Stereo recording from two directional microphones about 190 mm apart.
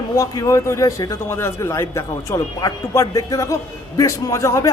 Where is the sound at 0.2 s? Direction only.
15° left (ahead or behind).